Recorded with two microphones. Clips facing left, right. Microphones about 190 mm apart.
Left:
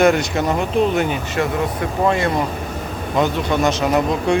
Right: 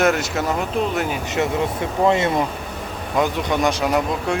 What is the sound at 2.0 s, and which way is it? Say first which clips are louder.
Speech: right 1 dB; 20° right (ahead or behind).